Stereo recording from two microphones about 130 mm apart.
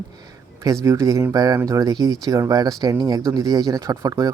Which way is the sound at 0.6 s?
25° right (ahead or behind).